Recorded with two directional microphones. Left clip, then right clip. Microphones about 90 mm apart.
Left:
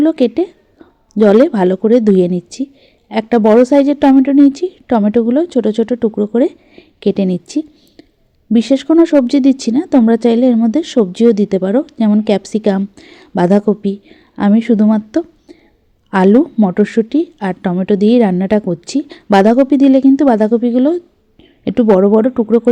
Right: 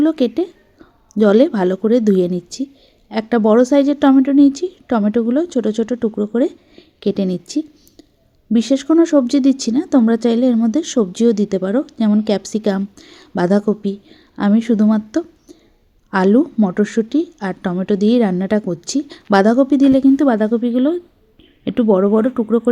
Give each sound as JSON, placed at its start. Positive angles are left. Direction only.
{"t": 0.0, "sound": "a woman's voice", "side_deg": 25}
{"t": 16.4, "sound": "speech", "side_deg": 30}